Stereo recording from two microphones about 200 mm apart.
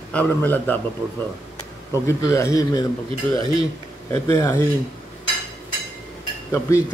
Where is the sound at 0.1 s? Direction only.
10° left (ahead or behind).